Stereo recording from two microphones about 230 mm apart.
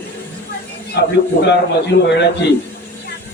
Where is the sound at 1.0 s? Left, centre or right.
Left.